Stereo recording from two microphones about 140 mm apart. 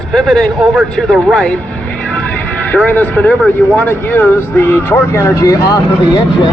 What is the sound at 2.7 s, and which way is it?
Speech, 10° left (ahead or behind).